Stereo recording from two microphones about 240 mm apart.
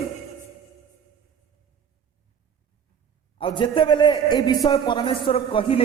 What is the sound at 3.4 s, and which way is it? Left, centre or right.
A man's voice, left.